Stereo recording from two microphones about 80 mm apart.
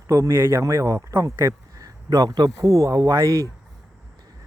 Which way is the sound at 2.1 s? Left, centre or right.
Right.